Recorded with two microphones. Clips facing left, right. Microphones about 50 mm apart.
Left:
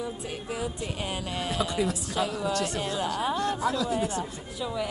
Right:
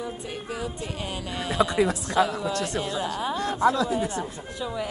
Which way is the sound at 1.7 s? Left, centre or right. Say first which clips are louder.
Right 5 dB; right.